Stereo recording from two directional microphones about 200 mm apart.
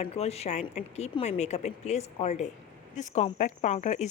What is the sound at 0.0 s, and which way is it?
Speech, 30° left (ahead or behind).